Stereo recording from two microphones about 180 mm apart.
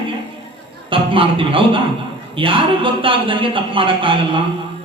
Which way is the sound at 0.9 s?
30° right (ahead or behind).